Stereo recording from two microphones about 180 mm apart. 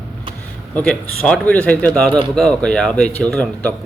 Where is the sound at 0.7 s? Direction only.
5° left (ahead or behind).